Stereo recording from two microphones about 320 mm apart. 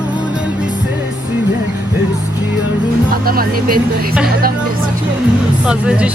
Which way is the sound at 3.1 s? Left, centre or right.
Right.